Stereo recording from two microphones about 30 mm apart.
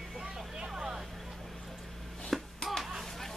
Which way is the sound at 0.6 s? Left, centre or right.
Centre.